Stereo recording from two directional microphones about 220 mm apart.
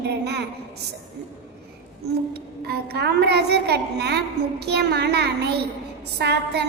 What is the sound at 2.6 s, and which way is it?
A woman's voice, 45° right (ahead or behind).